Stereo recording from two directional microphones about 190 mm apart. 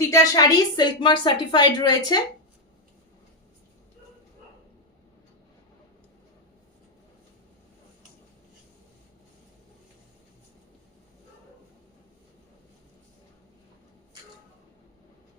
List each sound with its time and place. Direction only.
0.1 s a woman's voice: 20° left (ahead or behind)